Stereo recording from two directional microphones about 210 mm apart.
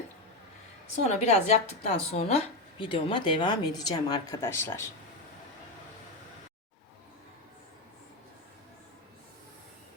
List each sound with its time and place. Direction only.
1.0 s a woman's voice: 30° left (ahead or behind); by 4.9 s 10° left (ahead or behind)